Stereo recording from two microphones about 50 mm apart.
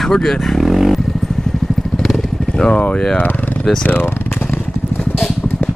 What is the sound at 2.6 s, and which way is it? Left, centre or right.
Speech, left.